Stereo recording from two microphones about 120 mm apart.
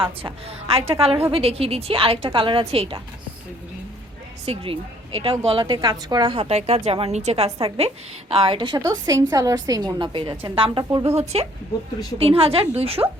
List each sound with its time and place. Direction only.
0.0 s a woman's voice: 50° right (ahead or behind)
4.4 s a woman's voice: 50° right (ahead or behind)
8.9 s a woman's voice: 30° right (ahead or behind); by 10.8 s 45° right (ahead or behind)
10.9 s a woman's voice: 55° right (ahead or behind)